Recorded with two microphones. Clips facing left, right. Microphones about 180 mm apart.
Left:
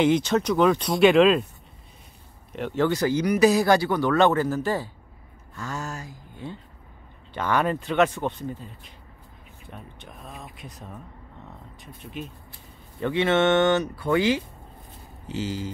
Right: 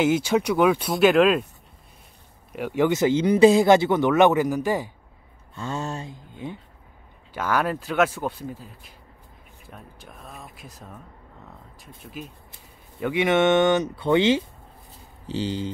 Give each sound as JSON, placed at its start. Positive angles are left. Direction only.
{"t": 0.0, "sound": "speech", "side_deg": -5}
{"t": 2.5, "sound": "speech", "side_deg": -10}
{"t": 5.5, "sound": "speech", "side_deg": -25}
{"t": 7.3, "sound": "speech", "side_deg": -5}
{"t": 13.0, "sound": "speech", "side_deg": -15}